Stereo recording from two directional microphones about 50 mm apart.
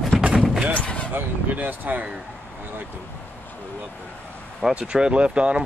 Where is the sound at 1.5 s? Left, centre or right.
Right.